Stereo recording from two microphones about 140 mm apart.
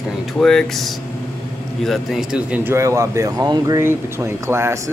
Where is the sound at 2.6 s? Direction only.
20° right (ahead or behind).